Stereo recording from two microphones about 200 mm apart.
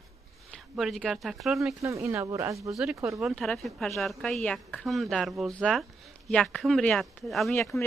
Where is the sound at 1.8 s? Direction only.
15° right (ahead or behind).